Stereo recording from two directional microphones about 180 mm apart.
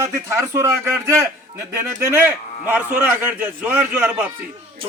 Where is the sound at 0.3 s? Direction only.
15° right (ahead or behind).